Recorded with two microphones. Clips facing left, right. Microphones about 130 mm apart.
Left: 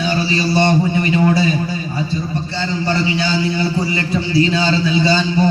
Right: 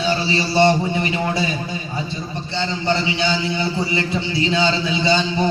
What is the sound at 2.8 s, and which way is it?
A man's voice, 25° right (ahead or behind).